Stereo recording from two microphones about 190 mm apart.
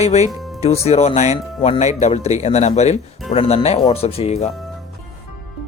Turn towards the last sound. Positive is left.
turn(degrees=30)  # may be behind; listen again after turning